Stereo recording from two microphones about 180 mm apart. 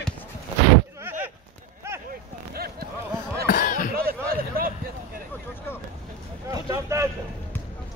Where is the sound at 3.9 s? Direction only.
55° right (ahead or behind).